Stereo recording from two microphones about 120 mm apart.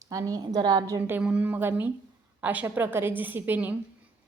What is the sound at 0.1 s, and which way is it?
Speech, 30° right (ahead or behind).